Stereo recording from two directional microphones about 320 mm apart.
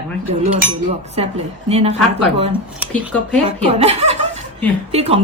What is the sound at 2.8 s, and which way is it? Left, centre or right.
Speech, centre.